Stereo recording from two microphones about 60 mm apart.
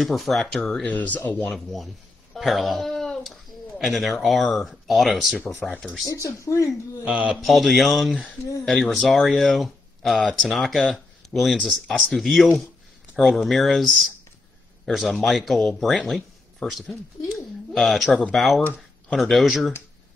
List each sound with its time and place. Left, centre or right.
0.0 s speech: centre
0.8 s speech: left
2.3 s a sound: centre
4.2 s speech: centre
5.6 s speech: centre
6.0 s speech: left
7.1 s a man's voice: right
7.3 s speech: centre
10.9 s a sound: centre
11.5 s speech: centre
16.9 s a sound: centre
17.9 s speech: centre